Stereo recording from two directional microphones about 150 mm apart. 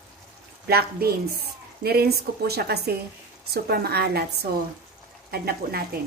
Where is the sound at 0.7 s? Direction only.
90° right.